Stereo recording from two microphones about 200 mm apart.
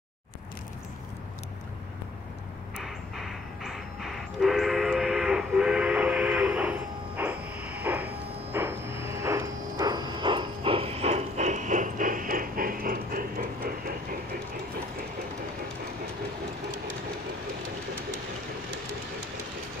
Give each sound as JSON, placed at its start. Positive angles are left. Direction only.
{"t": 2.8, "sound": "train", "side_deg": 0}
{"t": 8.5, "sound": "vehicle", "side_deg": -10}